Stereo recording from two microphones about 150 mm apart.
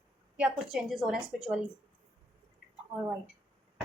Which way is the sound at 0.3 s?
5° right (ahead or behind).